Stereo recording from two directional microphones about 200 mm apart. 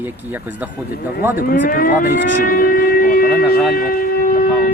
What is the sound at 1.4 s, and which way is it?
Speech, 50° left (ahead or behind).